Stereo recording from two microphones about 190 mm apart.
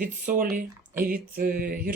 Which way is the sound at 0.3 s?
45° right (ahead or behind).